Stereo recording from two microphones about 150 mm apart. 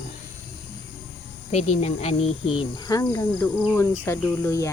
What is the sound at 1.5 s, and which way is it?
Speech, 45° left (ahead or behind).